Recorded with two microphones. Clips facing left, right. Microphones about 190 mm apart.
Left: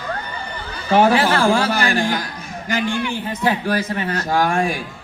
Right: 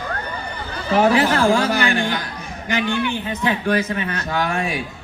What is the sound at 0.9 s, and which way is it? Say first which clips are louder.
A man's voice: left 1 dB; 30° left (ahead or behind).